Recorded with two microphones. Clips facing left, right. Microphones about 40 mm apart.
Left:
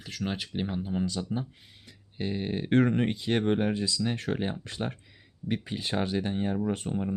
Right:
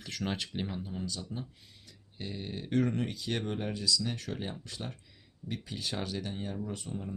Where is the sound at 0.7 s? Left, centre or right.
Left.